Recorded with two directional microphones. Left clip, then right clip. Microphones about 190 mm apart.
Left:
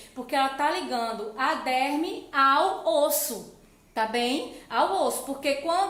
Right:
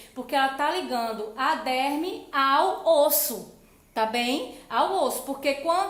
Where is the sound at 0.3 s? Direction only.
30° right (ahead or behind).